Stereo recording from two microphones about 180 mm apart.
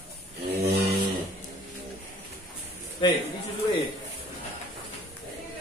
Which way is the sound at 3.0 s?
25° left (ahead or behind).